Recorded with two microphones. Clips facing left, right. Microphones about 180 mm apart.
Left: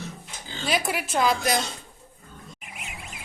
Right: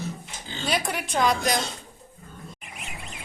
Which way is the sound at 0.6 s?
5° left (ahead or behind).